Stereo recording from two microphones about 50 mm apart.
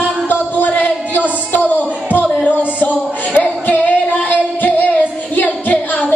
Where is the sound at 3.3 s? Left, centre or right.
Left.